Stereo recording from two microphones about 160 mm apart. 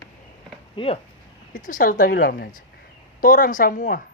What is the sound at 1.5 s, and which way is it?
A woman's voice, 55° left (ahead or behind).